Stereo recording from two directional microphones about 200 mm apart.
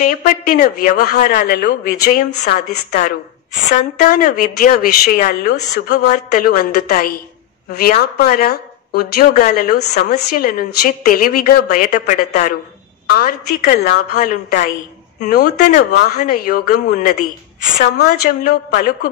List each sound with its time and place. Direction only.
0.0 s speech: 45° left (ahead or behind)
2.4 s speech: 55° left (ahead or behind)
3.7 s speech: 40° left (ahead or behind)
15.9 s speech: 50° left (ahead or behind)
18.4 s speech: 55° left (ahead or behind)